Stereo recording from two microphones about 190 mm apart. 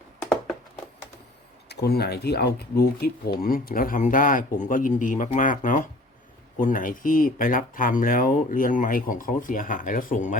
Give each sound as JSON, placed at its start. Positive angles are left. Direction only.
{"t": 1.7, "sound": "speech", "side_deg": 60}